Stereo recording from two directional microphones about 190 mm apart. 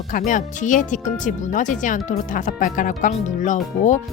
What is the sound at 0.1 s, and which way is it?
A woman's voice, 45° left (ahead or behind).